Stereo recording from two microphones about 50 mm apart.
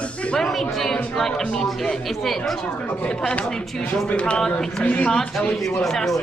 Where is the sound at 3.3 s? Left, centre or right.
Centre.